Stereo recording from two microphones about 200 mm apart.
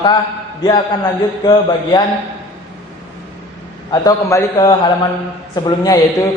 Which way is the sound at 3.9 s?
20° left (ahead or behind).